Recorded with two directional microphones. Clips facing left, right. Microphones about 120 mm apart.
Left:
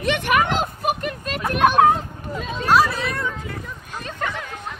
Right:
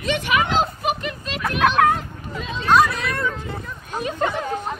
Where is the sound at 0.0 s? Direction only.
50° left (ahead or behind).